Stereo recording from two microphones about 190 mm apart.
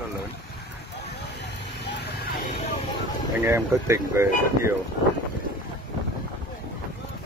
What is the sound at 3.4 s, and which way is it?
Speech, 15° right (ahead or behind).